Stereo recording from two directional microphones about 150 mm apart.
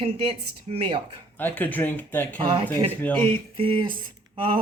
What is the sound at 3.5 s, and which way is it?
Speech, 35° right (ahead or behind).